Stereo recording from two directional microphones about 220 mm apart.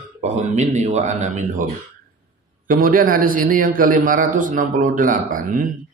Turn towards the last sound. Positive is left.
turn(degrees=-40)  # may be behind; listen again after turning